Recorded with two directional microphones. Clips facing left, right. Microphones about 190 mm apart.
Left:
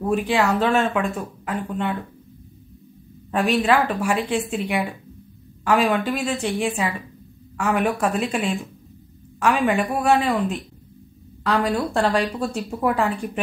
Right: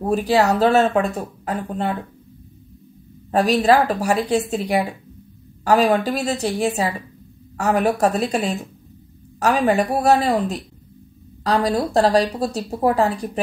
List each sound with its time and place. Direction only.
0.0 s a woman's voice: 35° right (ahead or behind)
3.3 s a woman's voice: 40° right (ahead or behind)